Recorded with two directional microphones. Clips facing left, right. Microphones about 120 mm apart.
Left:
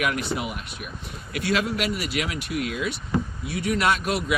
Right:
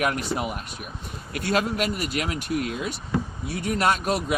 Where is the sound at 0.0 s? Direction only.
40° right (ahead or behind).